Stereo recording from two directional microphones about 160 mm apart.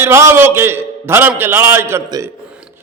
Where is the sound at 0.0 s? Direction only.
15° right (ahead or behind).